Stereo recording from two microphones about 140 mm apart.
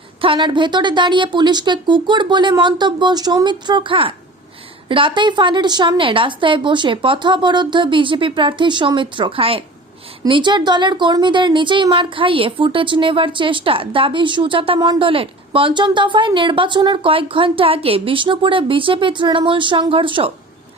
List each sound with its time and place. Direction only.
0.2 s speech: 35° right (ahead or behind)